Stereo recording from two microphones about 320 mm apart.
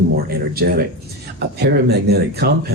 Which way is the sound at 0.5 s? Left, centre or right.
Right.